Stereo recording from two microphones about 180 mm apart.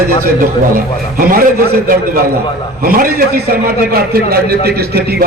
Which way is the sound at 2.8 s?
50° right (ahead or behind).